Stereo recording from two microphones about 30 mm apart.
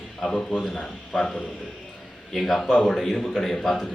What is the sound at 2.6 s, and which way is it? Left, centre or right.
A man's voice, left.